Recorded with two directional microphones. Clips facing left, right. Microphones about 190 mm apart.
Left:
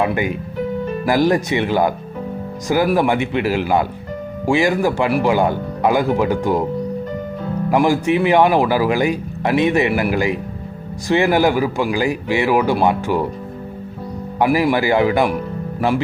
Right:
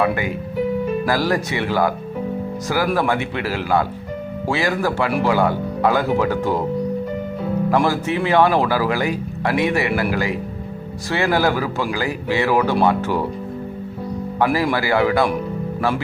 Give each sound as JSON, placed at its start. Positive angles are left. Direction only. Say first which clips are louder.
{"t": 0.0, "sound": "speech", "louder": "left 1 dB", "side_deg": 20}
{"t": 7.7, "sound": "speech", "louder": "left 5 dB", "side_deg": 15}
{"t": 14.3, "sound": "speech", "louder": "left 3 dB", "side_deg": 15}